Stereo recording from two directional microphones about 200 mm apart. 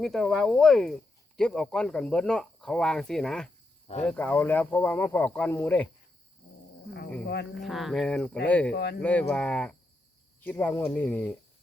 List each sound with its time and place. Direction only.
0.0 s speech: centre (ahead or behind)
7.5 s speech: centre (ahead or behind)
8.7 s speech: 55° left (ahead or behind)
9.0 s speech: 5° left (ahead or behind)